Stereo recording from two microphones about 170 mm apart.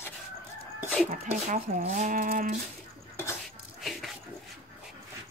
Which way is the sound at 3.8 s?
Centre (ahead or behind).